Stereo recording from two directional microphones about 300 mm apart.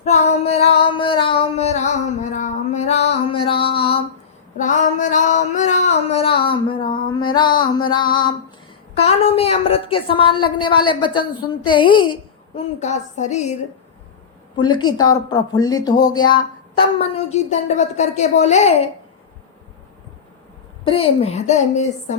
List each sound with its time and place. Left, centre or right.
0.0 s a sound: left
7.3 s music: centre
7.9 s a woman's voice: centre
20.8 s speech: centre